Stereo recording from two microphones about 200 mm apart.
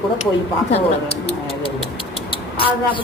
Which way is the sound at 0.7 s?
30° left (ahead or behind).